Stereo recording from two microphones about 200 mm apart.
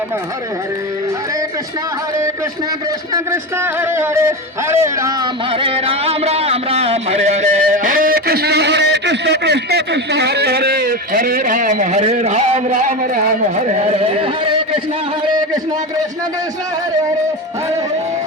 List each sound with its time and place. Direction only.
3.6 s speech: 10° right (ahead or behind)
5.5 s a man's voice: 25° right (ahead or behind)